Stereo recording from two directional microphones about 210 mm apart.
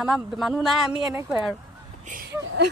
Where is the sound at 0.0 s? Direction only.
Centre (ahead or behind).